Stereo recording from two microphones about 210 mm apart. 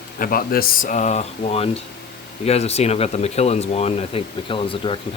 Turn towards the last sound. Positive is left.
turn(degrees=25)  # may be behind; listen again after turning